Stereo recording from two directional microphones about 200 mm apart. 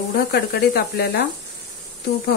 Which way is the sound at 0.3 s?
55° left (ahead or behind).